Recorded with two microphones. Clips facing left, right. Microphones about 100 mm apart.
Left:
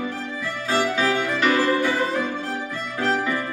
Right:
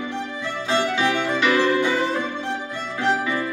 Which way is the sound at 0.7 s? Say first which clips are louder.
Even; 40° left (ahead or behind).